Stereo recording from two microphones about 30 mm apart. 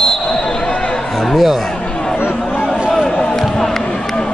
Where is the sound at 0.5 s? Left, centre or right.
Left.